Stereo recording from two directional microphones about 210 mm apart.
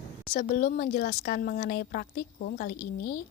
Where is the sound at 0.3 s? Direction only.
45° left (ahead or behind).